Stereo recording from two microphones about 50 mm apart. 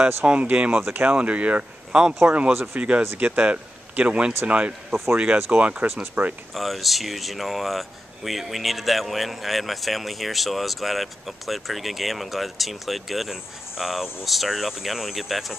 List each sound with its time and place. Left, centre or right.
0.0 s speech: right
1.9 s speech: centre
2.5 s speech: right
3.2 s speech: right
6.2 s speech: right
6.5 s speech: centre